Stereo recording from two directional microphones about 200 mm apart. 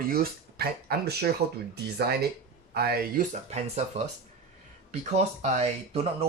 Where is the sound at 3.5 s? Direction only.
35° right (ahead or behind).